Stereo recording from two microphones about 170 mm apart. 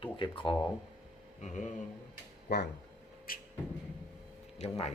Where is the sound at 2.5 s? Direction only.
75° left (ahead or behind).